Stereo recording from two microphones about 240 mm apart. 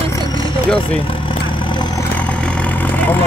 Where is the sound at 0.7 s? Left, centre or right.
Left.